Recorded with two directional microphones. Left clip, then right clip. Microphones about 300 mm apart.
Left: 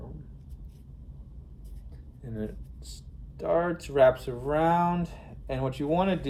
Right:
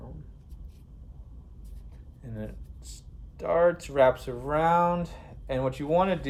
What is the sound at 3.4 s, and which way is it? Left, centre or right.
Speech, centre.